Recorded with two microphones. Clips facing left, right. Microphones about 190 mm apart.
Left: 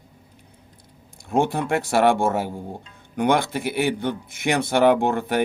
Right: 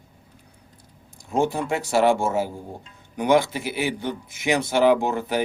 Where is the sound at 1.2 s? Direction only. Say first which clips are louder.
Left 1 dB; 55° left (ahead or behind).